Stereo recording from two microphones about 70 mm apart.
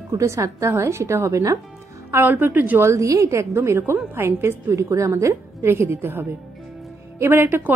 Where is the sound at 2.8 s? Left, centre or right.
Right.